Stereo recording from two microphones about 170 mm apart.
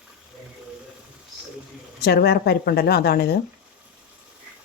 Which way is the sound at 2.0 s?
65° left (ahead or behind).